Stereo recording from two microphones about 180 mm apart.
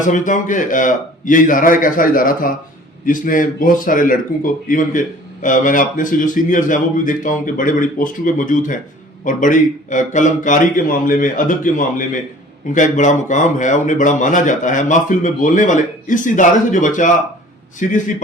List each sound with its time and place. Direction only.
0.0 s speech: 45° left (ahead or behind)